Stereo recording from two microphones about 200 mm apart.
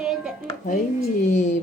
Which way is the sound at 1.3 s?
35° left (ahead or behind).